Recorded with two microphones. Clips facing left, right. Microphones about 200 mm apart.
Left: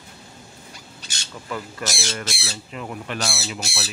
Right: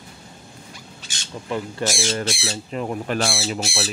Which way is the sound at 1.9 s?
35° right (ahead or behind).